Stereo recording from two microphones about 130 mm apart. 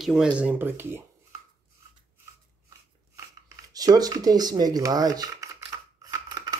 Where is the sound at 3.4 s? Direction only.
30° right (ahead or behind).